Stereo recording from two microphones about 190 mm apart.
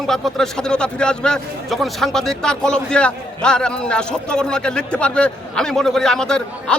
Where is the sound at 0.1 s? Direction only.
Centre (ahead or behind).